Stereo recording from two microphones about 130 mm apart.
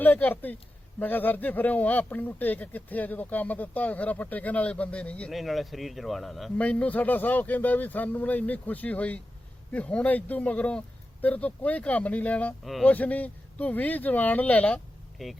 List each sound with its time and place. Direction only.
0.0 s speech: 10° left (ahead or behind)
12.6 s speech: centre (ahead or behind)
12.9 s speech: 10° left (ahead or behind)
15.2 s speech: centre (ahead or behind)